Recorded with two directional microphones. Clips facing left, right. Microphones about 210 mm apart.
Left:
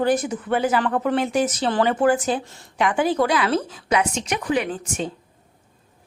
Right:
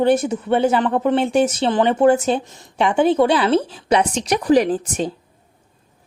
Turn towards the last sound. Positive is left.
turn(degrees=-35)  # may be behind; listen again after turning